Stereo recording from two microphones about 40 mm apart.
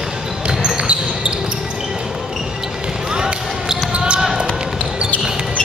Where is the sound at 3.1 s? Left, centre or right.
Centre.